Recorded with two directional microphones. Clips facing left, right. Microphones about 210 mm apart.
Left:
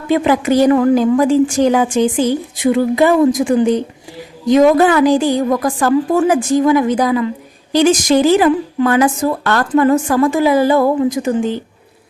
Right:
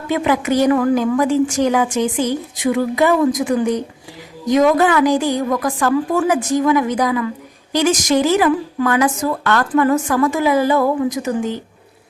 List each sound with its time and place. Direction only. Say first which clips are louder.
0.1 s a woman's voice: left 4 dB; 30° left (ahead or behind)